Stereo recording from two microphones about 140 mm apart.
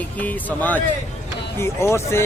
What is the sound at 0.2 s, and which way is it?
Speech, 10° left (ahead or behind).